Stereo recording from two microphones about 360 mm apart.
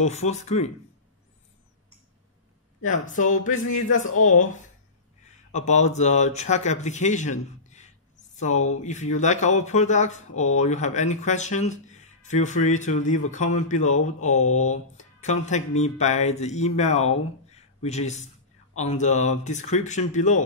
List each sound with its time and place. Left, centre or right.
0.0 s speech: centre
2.8 s speech: left